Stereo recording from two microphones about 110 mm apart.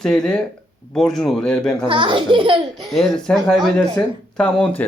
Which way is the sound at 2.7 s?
Centre (ahead or behind).